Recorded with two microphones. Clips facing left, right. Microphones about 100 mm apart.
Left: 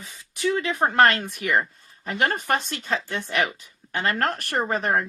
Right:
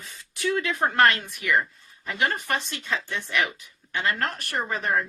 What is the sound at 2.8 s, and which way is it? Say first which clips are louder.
Speech: left 3 dB; 30° left (ahead or behind).